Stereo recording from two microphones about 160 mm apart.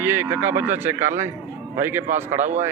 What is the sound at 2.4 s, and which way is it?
Speech, 50° right (ahead or behind).